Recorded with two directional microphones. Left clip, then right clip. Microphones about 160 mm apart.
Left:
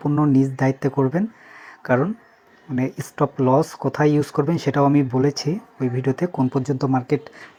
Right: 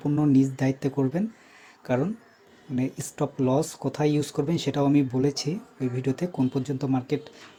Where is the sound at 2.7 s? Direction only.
15° left (ahead or behind).